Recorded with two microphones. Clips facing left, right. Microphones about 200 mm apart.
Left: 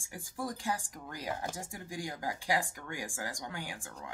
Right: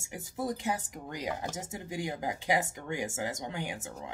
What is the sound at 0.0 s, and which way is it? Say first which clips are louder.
Speech: right 4 dB; 20° right (ahead or behind).